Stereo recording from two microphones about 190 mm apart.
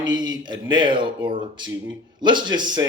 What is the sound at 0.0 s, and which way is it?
Speech, 20° right (ahead or behind).